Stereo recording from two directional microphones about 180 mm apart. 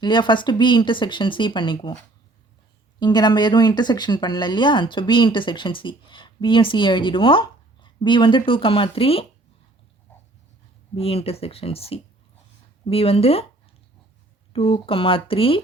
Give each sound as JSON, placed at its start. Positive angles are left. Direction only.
{"t": 0.0, "sound": "speech", "side_deg": 25}
{"t": 3.0, "sound": "speech", "side_deg": 25}
{"t": 10.9, "sound": "speech", "side_deg": 30}
{"t": 14.5, "sound": "speech", "side_deg": 30}